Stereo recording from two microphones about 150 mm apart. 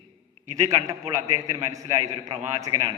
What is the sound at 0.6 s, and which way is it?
A man's voice, 20° right (ahead or behind).